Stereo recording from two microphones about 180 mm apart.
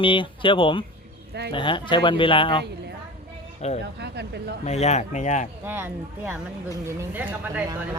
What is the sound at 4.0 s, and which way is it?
Speech, 70° right (ahead or behind).